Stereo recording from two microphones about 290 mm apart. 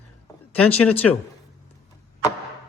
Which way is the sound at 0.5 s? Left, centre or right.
Centre.